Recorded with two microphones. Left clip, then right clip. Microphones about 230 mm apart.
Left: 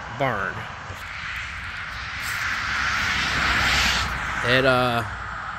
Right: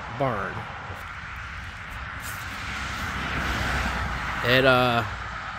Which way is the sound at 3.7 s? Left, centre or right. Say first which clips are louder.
Left 7 dB; right.